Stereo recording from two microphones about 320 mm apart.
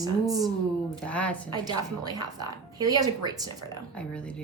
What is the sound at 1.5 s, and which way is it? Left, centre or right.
A woman's voice, centre.